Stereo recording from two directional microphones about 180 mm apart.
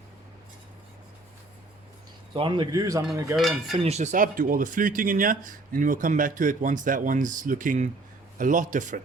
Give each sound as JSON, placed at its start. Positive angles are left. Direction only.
{"t": 2.3, "sound": "a man's voice", "side_deg": -25}
{"t": 3.3, "sound": "cutlery", "side_deg": 0}
{"t": 3.8, "sound": "speech", "side_deg": -35}